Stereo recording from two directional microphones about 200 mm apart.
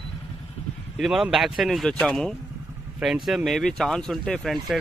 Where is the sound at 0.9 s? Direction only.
Centre (ahead or behind).